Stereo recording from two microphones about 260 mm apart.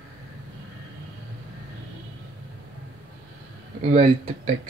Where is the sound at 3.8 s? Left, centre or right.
Right.